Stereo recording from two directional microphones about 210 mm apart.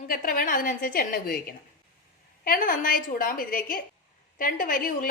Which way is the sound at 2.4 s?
40° left (ahead or behind).